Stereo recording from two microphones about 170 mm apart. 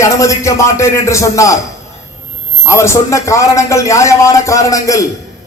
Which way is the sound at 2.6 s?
15° left (ahead or behind).